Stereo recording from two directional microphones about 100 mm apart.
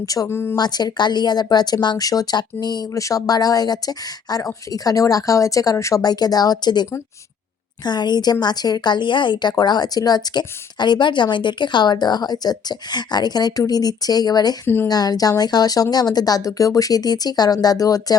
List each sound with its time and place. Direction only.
0.0 s speech: 35° left (ahead or behind)
0.3 s speech: 25° left (ahead or behind)
0.5 s speech: 45° left (ahead or behind)
7.9 s speech: 45° left (ahead or behind)